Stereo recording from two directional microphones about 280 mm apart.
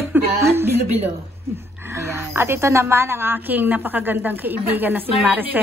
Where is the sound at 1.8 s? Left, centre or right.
Centre.